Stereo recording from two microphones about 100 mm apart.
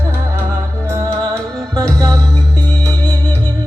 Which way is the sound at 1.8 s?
35° right (ahead or behind).